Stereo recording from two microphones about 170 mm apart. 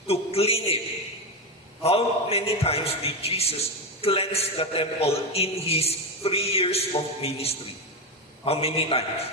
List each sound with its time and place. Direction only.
0.1 s a man's voice: 35° left (ahead or behind)
1.8 s a man's voice: 35° left (ahead or behind)